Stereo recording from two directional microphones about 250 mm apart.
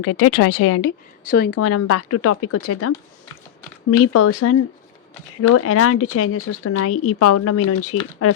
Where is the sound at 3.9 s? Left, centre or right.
Left.